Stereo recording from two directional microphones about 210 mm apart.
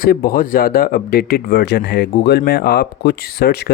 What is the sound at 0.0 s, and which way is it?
Speech, 45° left (ahead or behind).